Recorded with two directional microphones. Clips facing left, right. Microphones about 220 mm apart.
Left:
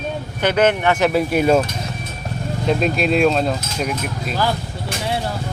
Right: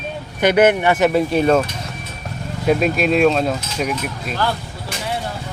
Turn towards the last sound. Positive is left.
turn(degrees=0)  # may be behind; listen again after turning